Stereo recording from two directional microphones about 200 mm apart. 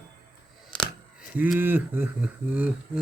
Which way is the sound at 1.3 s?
5° right (ahead or behind).